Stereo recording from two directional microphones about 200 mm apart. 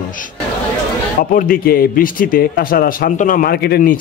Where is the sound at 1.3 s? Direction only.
45° left (ahead or behind).